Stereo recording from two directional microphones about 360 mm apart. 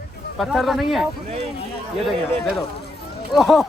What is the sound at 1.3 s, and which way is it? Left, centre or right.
Speech, centre.